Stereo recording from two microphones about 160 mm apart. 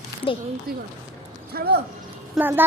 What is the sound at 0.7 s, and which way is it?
Speech, 70° right (ahead or behind).